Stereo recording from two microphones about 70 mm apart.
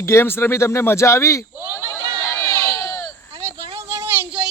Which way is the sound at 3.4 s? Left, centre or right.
Right.